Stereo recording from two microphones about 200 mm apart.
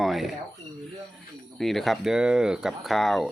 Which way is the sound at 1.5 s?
Centre (ahead or behind).